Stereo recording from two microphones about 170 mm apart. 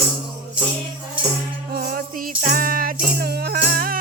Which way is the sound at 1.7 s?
60° right (ahead or behind).